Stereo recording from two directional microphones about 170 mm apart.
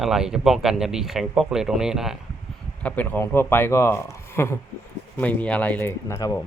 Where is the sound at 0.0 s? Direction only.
5° right (ahead or behind).